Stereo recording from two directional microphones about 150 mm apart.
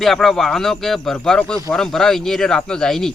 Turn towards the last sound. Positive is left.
turn(degrees=5)  # may be behind; listen again after turning